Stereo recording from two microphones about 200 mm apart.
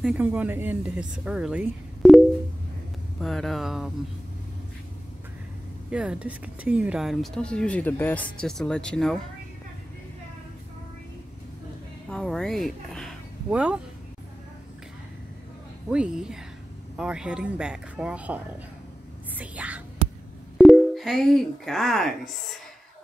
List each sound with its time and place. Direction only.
0.0 s speech: 5° right (ahead or behind)
5.9 s speech: 5° right (ahead or behind)
12.1 s speech: 5° left (ahead or behind)
15.9 s speech: 5° right (ahead or behind)
19.3 s whispering: 5° right (ahead or behind)
20.5 s speech: centre (ahead or behind)